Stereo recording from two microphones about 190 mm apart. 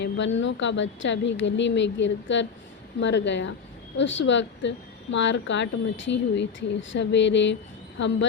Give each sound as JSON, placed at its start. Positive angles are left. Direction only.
{"t": 0.0, "sound": "speech", "side_deg": 75}